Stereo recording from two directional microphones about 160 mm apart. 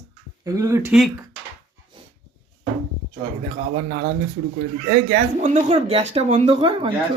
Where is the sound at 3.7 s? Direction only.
75° right (ahead or behind).